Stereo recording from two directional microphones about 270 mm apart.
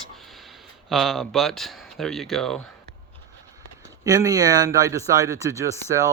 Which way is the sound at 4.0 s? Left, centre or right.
Centre.